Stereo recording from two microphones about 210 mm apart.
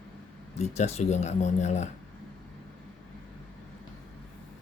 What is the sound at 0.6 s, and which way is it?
Speech, 30° left (ahead or behind).